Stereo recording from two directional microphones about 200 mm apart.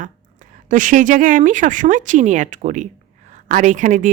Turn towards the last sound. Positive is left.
turn(degrees=-40)  # may be behind; listen again after turning